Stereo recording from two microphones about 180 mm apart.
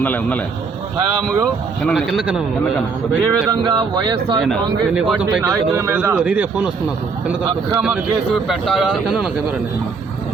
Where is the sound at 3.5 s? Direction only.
25° right (ahead or behind).